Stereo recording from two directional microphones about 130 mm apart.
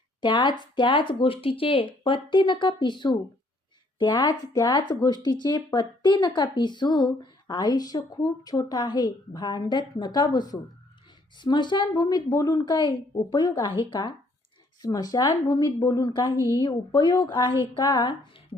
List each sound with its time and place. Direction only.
0.2 s speech: 35° left (ahead or behind)
14.8 s speech: 30° left (ahead or behind)